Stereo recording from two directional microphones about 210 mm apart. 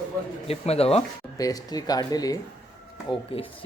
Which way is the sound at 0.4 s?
30° left (ahead or behind).